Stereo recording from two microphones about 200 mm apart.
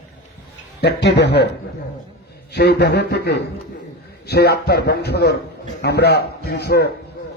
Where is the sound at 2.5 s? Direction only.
55° left (ahead or behind).